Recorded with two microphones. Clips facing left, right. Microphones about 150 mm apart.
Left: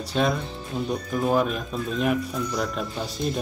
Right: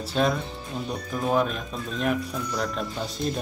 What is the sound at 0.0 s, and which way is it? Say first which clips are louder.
Speech: even; centre (ahead or behind).